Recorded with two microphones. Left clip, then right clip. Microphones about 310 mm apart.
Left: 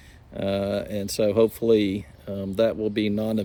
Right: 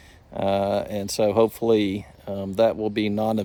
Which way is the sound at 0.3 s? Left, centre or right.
Centre.